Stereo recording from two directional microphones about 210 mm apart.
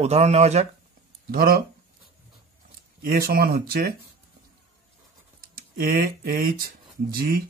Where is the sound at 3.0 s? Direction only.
45° right (ahead or behind).